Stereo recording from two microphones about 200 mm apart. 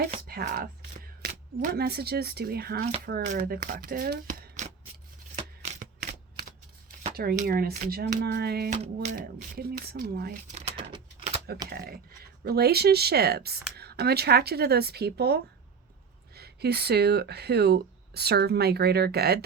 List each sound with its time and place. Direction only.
0.3 s speech: 50° right (ahead or behind)
5.4 s shuffling cards: 30° right (ahead or behind)
5.8 s typewriter: 35° right (ahead or behind)
7.0 s speech: 50° right (ahead or behind)
10.5 s a sound: 30° right (ahead or behind)
11.7 s speech: 50° right (ahead or behind)